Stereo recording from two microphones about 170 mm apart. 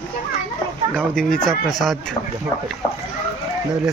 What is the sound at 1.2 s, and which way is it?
Speech, 5° left (ahead or behind).